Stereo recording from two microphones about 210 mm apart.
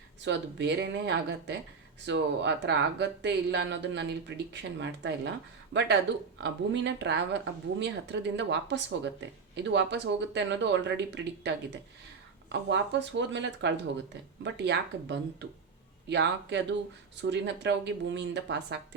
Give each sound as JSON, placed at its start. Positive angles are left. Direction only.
{"t": 0.3, "sound": "speech", "side_deg": -55}
{"t": 6.4, "sound": "speech", "side_deg": -55}